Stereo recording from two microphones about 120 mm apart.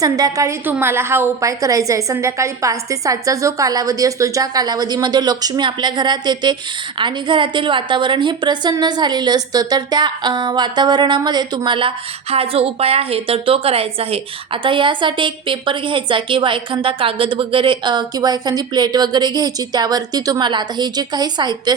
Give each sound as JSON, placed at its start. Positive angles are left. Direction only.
{"t": 0.0, "sound": "a woman's voice", "side_deg": -30}
{"t": 0.6, "sound": "a woman's voice", "side_deg": -15}